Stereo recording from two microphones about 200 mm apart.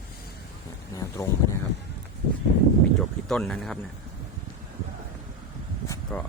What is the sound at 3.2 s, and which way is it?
Speech, 5° left (ahead or behind).